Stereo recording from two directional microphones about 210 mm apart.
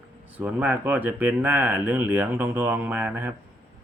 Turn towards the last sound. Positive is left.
turn(degrees=-10)  # may be behind; listen again after turning